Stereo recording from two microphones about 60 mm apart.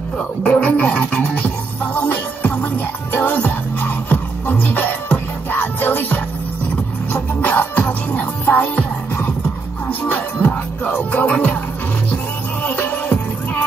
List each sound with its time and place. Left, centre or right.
0.4 s music: left
7.4 s music: left
12.6 s music: left